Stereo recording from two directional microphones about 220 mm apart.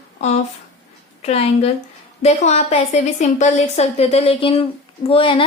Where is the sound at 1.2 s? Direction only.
30° left (ahead or behind).